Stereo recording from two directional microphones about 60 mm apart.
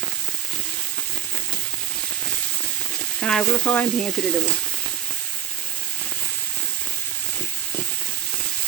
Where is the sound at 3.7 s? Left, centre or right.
Left.